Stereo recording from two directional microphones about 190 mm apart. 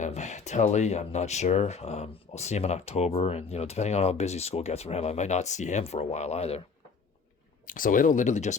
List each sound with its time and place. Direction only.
0.0 s speech: 35° left (ahead or behind)
7.7 s speech: 45° left (ahead or behind)